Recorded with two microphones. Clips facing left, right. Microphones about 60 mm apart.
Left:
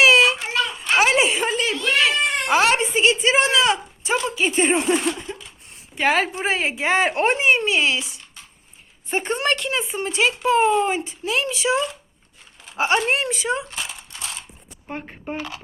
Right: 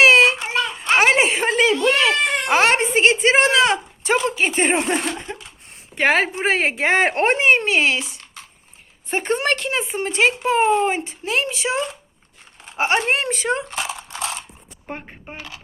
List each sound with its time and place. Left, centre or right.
0.0 s a sound: right
2.5 s speech: right
9.0 s speech: right
12.6 s mechanisms: right
15.0 s speech: centre